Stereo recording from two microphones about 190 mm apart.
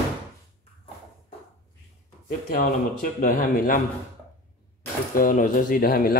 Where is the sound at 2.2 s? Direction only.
45° left (ahead or behind).